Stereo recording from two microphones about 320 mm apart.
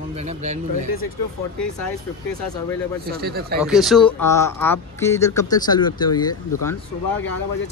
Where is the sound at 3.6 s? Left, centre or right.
Centre.